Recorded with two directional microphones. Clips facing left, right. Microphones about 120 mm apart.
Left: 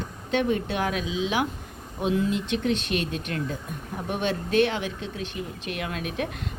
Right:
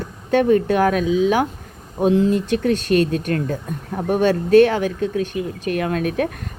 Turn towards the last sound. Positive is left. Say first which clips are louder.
# right 9 dB
turn(degrees=-45)  # may be behind; listen again after turning